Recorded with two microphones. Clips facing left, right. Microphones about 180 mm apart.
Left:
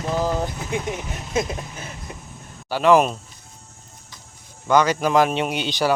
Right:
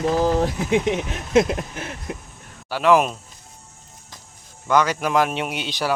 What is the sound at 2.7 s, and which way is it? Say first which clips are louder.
Speech: left 1 dB; centre (ahead or behind).